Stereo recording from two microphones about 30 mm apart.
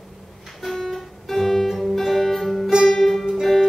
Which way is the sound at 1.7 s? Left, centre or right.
Centre.